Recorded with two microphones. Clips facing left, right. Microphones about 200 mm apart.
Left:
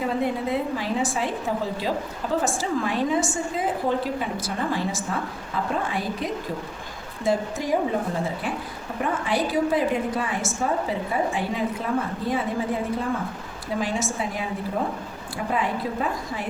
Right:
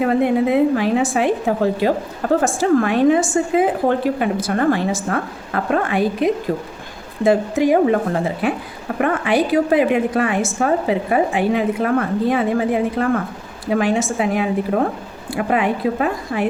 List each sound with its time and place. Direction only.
0.0 s a woman's voice: 65° right (ahead or behind)